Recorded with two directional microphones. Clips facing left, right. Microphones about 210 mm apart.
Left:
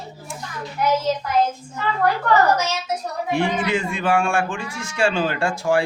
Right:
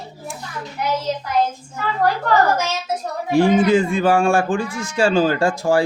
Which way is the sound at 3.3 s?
40° right (ahead or behind).